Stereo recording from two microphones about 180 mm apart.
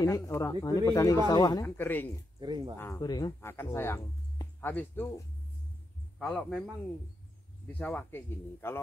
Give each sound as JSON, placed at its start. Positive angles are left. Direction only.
{"t": 0.0, "sound": "speech", "side_deg": 15}
{"t": 2.4, "sound": "speech", "side_deg": -25}
{"t": 2.8, "sound": "speech", "side_deg": 20}
{"t": 3.3, "sound": "a man's voice", "side_deg": 10}
{"t": 7.8, "sound": "speech", "side_deg": 10}